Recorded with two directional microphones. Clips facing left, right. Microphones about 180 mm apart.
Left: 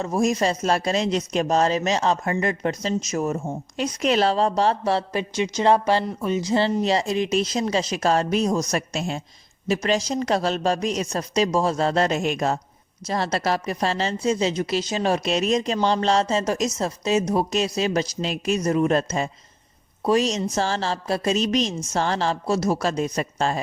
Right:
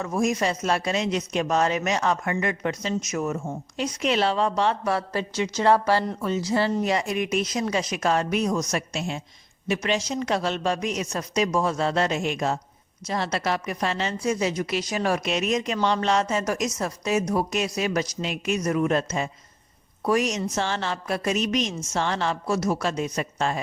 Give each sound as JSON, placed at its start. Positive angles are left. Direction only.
{"t": 0.0, "sound": "speech", "side_deg": 30}
{"t": 3.8, "sound": "a woman's voice", "side_deg": 40}
{"t": 5.1, "sound": "a woman's voice", "side_deg": 20}